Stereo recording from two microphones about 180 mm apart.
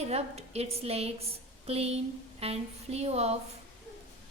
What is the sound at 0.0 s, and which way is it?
A woman's voice, 35° right (ahead or behind).